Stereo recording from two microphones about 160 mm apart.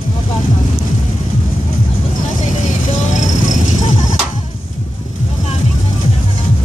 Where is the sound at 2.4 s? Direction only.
50° left (ahead or behind).